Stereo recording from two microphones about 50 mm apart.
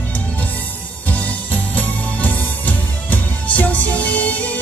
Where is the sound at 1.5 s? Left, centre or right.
Left.